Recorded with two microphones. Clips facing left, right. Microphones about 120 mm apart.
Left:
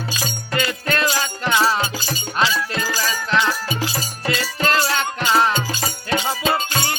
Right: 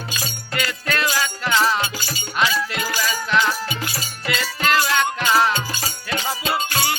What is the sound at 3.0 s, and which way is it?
Music, 25° left (ahead or behind).